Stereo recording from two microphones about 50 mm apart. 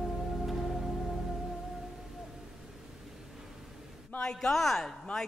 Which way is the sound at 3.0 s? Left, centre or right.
Centre.